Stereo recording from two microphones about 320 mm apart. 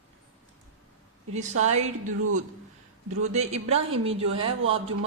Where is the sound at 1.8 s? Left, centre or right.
Right.